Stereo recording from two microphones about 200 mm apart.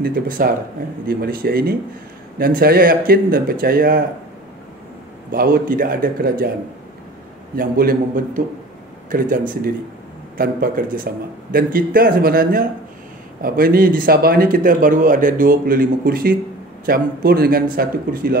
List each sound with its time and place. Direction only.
0.0 s a man's voice: 45° right (ahead or behind)
5.3 s a man's voice: 45° right (ahead or behind)
7.5 s a man's voice: 45° right (ahead or behind)
9.1 s a man's voice: 45° right (ahead or behind)
10.3 s a man's voice: 45° right (ahead or behind)